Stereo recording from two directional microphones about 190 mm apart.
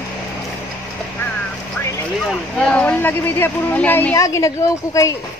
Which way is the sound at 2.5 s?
5° left (ahead or behind).